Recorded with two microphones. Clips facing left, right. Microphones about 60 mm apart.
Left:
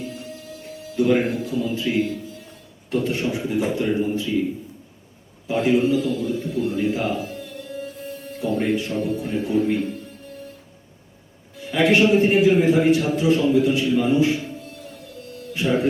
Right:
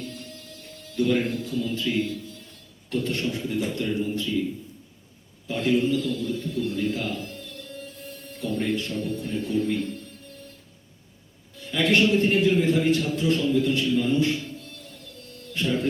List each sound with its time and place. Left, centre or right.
0.0 s music: centre
4.1 s a man's voice: centre
5.5 s a man's voice: centre
11.6 s a man's voice: centre